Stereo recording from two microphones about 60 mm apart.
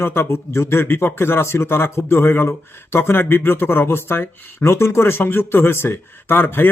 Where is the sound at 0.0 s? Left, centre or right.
Left.